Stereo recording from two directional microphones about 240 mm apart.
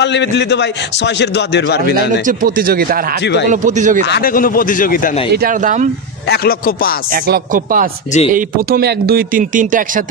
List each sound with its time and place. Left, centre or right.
0.0 s a man's voice: left
2.2 s speech: right
4.0 s speech: left
5.3 s speech: right
6.2 s speech: left
7.2 s speech: right